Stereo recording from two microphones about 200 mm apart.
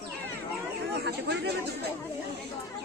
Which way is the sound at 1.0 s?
60° right (ahead or behind).